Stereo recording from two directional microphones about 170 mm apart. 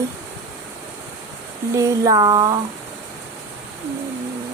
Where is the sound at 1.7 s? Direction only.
20° right (ahead or behind).